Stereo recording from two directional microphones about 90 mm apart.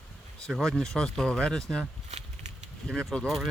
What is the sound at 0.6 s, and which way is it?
Speech, 5° left (ahead or behind).